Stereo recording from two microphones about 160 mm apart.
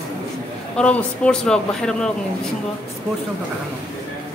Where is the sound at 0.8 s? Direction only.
5° left (ahead or behind).